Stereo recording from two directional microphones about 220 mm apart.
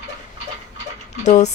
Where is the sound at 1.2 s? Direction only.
30° left (ahead or behind).